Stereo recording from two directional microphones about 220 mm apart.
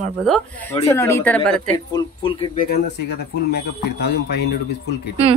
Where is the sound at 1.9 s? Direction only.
25° left (ahead or behind).